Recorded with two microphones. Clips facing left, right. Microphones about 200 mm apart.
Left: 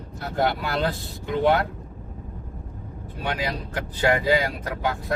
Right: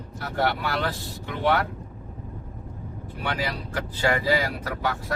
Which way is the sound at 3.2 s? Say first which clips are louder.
Left 1 dB; 20° left (ahead or behind).